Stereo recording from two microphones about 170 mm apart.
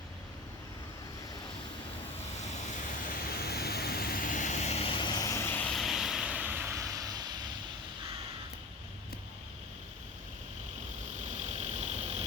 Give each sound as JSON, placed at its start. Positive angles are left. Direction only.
{"t": 3.2, "sound": "vehicle", "side_deg": 65}
{"t": 11.3, "sound": "vehicle", "side_deg": -45}